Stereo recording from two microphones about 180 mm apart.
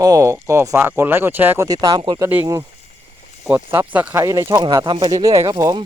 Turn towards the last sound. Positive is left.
turn(degrees=-20)  # may be behind; listen again after turning